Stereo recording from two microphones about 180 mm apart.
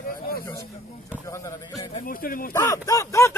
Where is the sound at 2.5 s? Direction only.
20° left (ahead or behind).